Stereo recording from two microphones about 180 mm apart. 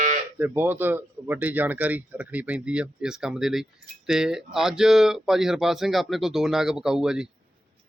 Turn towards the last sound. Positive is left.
turn(degrees=-5)  # may be behind; listen again after turning